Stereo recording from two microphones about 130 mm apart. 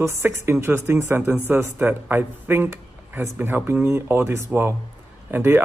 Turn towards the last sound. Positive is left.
turn(degrees=-15)  # may be behind; listen again after turning